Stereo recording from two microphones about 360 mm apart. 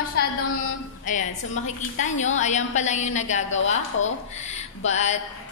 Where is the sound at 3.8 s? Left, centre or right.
Left.